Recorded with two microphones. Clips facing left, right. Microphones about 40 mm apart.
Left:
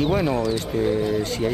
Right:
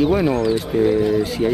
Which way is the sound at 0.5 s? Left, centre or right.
Centre.